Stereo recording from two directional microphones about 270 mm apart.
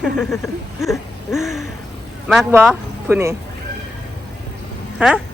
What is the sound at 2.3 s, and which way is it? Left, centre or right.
Speech, centre.